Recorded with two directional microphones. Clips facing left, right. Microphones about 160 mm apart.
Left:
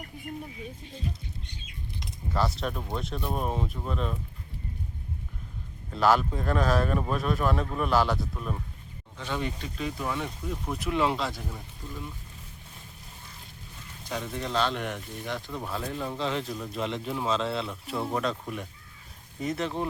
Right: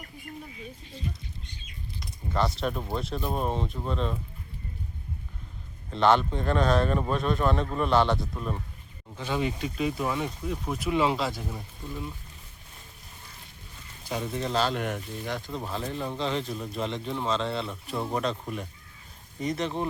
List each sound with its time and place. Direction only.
2.3 s speech: centre (ahead or behind)
5.9 s speech: 5° left (ahead or behind)
14.1 s speech: 5° right (ahead or behind)